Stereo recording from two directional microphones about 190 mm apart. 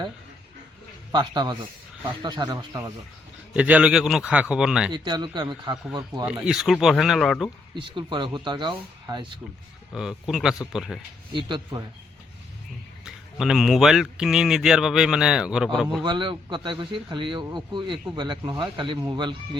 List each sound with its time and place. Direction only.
1.1 s speech: 25° right (ahead or behind)
3.5 s speech: 5° right (ahead or behind)
4.9 s speech: 25° right (ahead or behind)
6.2 s speech: 5° right (ahead or behind)
7.9 s speech: 25° right (ahead or behind)
9.9 s speech: centre (ahead or behind)
11.3 s speech: 25° right (ahead or behind)
13.1 s speech: centre (ahead or behind)
16.0 s speech: 25° right (ahead or behind)